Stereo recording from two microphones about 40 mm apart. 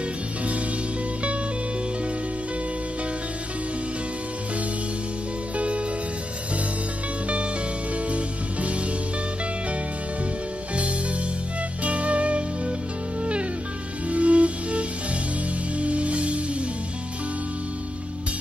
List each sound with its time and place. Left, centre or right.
5.6 s music: right
8.1 s music: right
11.8 s music: right
14.0 s music: right